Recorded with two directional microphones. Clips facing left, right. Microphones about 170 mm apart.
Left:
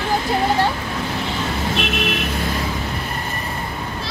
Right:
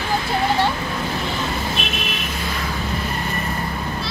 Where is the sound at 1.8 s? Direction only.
70° left (ahead or behind).